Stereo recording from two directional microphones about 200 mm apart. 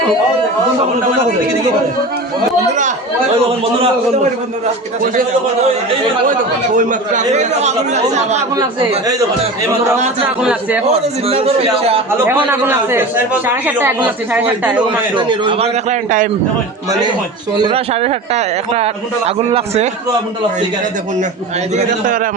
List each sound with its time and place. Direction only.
6.7 s speech: 40° right (ahead or behind)
10.2 s speech: 5° right (ahead or behind)
10.8 s a man's voice: 30° right (ahead or behind)
12.5 s speech: 10° right (ahead or behind)
15.1 s speech: 25° right (ahead or behind); by 16.3 s 40° right (ahead or behind)
17.6 s speech: 25° right (ahead or behind)
21.8 s speech: 40° right (ahead or behind)